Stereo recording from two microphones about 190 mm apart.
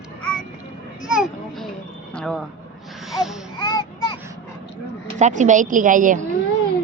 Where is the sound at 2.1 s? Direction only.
5° left (ahead or behind).